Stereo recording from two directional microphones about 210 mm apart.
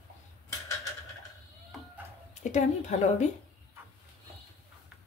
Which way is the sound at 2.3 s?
35° left (ahead or behind).